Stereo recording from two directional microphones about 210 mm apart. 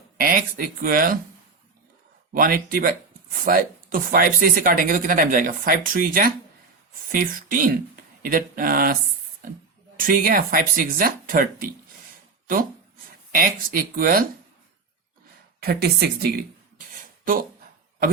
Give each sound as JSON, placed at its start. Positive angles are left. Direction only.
{"t": 0.2, "sound": "speech", "side_deg": -40}
{"t": 2.3, "sound": "speech", "side_deg": -40}
{"t": 10.0, "sound": "speech", "side_deg": -40}
{"t": 13.3, "sound": "speech", "side_deg": -40}
{"t": 15.6, "sound": "speech", "side_deg": -50}